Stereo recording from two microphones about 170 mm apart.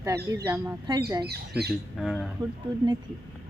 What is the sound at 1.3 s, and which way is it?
Speech, 70° right (ahead or behind).